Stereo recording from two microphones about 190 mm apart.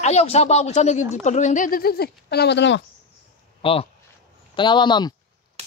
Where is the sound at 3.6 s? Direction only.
30° left (ahead or behind).